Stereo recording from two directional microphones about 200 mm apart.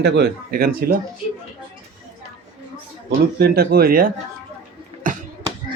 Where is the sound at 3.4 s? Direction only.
50° right (ahead or behind).